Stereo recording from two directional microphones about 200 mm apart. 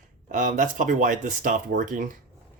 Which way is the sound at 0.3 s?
40° right (ahead or behind).